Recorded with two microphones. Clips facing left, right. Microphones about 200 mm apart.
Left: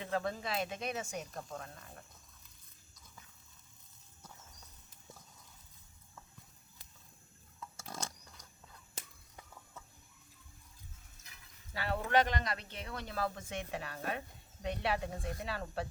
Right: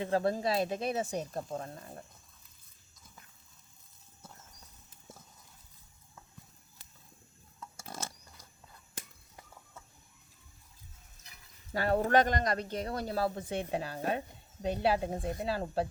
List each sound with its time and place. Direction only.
0.0 s speech: 35° right (ahead or behind)
7.6 s a sound: 5° right (ahead or behind)
11.7 s speech: 45° right (ahead or behind)